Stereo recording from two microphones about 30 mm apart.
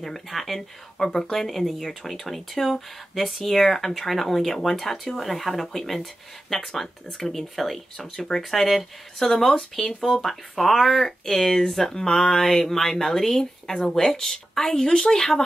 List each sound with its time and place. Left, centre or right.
0.0 s speech: centre
0.9 s speech: centre
1.4 s speech: centre
7.5 s speech: centre
10.2 s a woman's voice: centre